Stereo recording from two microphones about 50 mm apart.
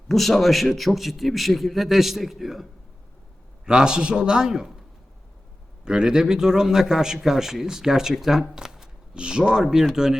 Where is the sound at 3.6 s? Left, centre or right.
Centre.